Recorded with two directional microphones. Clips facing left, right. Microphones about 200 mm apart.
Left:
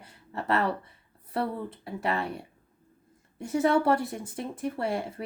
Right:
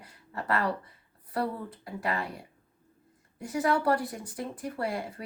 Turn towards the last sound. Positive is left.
turn(degrees=25)  # may be behind; listen again after turning